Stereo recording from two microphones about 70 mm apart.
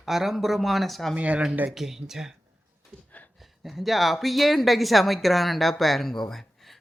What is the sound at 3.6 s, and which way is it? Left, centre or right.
Speech, centre.